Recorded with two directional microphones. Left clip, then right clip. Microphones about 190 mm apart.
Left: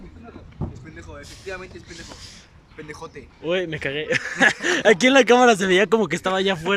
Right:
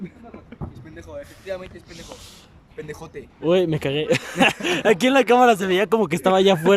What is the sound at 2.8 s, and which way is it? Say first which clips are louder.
Speech: right 2 dB; 35° right (ahead or behind).